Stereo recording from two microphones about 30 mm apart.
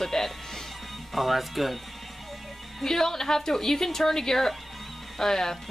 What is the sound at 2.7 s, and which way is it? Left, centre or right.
A woman's voice, centre.